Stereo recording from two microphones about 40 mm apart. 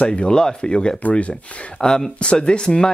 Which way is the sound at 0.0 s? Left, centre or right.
Left.